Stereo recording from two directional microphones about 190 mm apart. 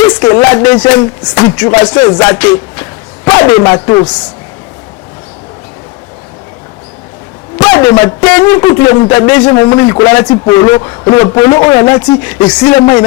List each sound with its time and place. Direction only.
0.0 s a man's voice: 20° left (ahead or behind)
7.6 s a man's voice: 15° left (ahead or behind)